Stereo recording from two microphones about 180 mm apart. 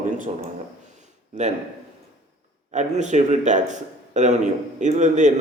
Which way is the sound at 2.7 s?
40° right (ahead or behind).